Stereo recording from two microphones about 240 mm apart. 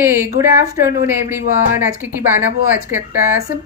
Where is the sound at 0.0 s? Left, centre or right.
Centre.